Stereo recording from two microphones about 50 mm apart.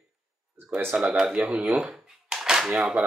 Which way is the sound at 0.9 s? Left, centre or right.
Centre.